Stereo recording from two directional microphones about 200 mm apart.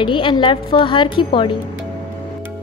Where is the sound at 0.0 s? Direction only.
25° left (ahead or behind).